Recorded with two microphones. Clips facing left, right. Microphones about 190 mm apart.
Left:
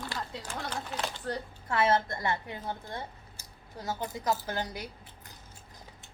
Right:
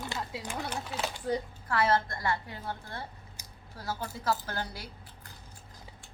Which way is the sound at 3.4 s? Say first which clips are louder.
Right 1 dB; 15° right (ahead or behind).